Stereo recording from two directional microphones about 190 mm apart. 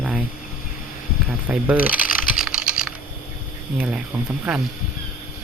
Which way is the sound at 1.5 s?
10° right (ahead or behind).